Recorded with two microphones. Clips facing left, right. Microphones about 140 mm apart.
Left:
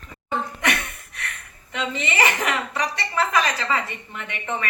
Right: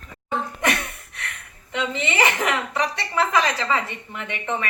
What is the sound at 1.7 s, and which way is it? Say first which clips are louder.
A woman's voice: right 2 dB; 20° right (ahead or behind).